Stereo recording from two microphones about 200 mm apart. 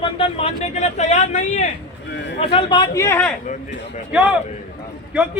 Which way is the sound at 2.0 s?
60° left (ahead or behind).